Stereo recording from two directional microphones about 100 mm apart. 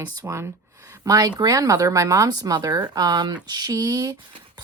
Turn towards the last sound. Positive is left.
turn(degrees=-35)  # may be behind; listen again after turning